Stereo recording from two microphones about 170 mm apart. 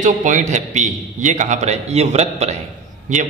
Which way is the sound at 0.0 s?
50° right (ahead or behind).